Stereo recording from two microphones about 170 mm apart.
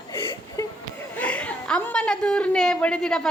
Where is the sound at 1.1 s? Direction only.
5° left (ahead or behind).